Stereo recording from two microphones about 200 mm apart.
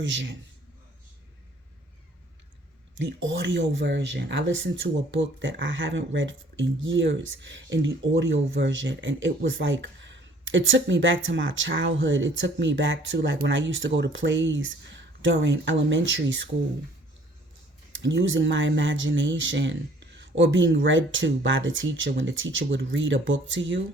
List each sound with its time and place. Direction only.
0.0 s a man's voice: 65° right (ahead or behind)
3.0 s speech: 70° right (ahead or behind)
18.0 s speech: 65° right (ahead or behind)